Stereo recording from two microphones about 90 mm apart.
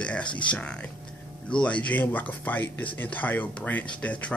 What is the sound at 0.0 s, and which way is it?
Speech, 10° left (ahead or behind).